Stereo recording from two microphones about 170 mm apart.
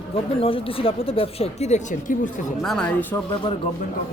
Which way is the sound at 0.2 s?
35° left (ahead or behind).